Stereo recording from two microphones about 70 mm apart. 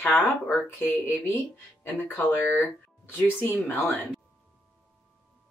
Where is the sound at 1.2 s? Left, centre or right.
Left.